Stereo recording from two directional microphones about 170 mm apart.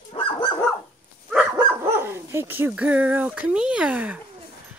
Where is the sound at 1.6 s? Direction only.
15° right (ahead or behind).